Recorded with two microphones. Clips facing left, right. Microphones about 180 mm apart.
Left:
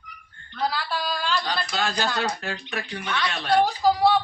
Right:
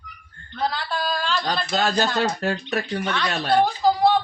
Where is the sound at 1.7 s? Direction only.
40° right (ahead or behind).